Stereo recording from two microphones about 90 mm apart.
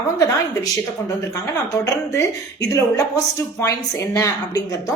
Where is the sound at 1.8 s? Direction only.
35° left (ahead or behind).